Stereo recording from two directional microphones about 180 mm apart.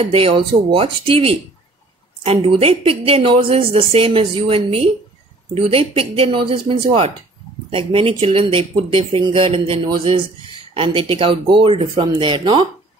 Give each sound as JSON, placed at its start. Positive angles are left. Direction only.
{"t": 0.0, "sound": "a woman's voice", "side_deg": -30}